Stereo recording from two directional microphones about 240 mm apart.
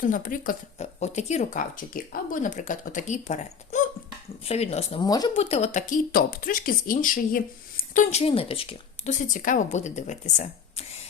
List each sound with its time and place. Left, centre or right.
0.0 s speech: left